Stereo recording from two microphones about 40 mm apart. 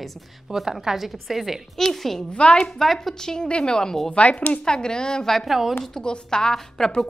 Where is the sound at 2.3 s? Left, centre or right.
Left.